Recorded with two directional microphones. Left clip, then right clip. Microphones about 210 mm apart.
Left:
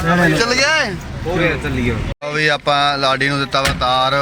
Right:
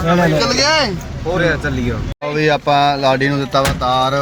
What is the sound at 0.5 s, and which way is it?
Speech, 15° left (ahead or behind).